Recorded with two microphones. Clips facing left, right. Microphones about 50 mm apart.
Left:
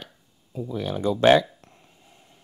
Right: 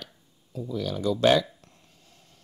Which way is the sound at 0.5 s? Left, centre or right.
Left.